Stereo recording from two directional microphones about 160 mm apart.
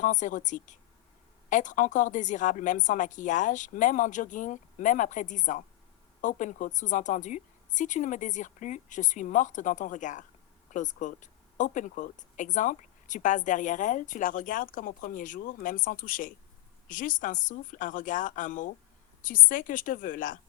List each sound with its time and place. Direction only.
0.0 s a woman's voice: 50° left (ahead or behind)